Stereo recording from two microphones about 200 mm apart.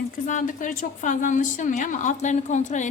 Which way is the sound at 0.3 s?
40° left (ahead or behind).